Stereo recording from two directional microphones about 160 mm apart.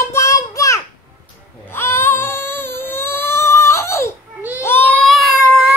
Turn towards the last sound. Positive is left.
turn(degrees=0)  # may be behind; listen again after turning